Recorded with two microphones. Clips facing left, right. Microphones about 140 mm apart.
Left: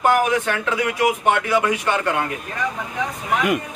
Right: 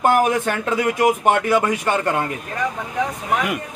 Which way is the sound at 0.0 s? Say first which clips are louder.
Right 1 dB; 45° right (ahead or behind).